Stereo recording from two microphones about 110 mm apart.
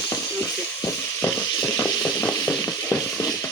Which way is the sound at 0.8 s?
20° left (ahead or behind).